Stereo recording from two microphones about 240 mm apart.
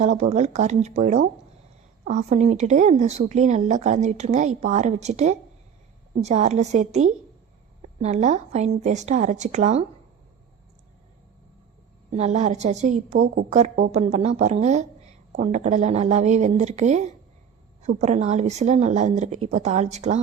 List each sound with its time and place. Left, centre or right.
0.0 s a woman's voice: right
12.1 s a woman's voice: right